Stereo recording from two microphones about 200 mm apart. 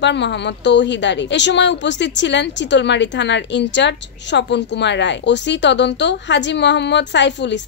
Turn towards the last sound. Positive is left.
turn(degrees=60)  # may be behind; listen again after turning